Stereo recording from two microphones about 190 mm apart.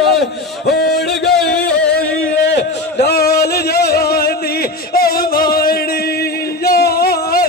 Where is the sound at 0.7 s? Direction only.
60° left (ahead or behind).